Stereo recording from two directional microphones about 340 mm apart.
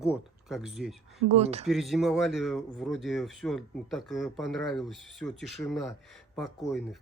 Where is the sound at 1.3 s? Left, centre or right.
Centre.